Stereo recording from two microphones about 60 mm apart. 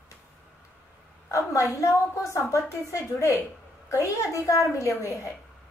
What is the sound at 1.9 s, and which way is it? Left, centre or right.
A woman's voice, left.